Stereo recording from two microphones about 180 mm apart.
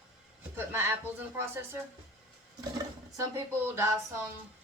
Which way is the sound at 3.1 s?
15° right (ahead or behind).